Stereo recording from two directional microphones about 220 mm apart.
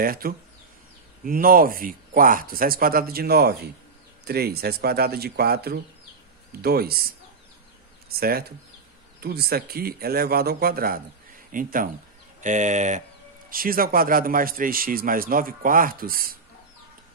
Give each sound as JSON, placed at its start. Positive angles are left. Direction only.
{"t": 0.0, "sound": "a man's voice", "side_deg": -40}
{"t": 8.1, "sound": "a man's voice", "side_deg": -45}